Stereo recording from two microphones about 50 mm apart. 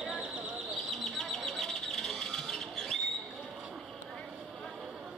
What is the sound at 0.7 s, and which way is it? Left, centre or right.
Bird, centre.